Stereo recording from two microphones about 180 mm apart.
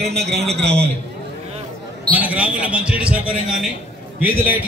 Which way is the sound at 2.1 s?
10° right (ahead or behind).